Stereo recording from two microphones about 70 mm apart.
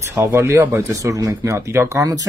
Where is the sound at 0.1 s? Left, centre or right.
Right.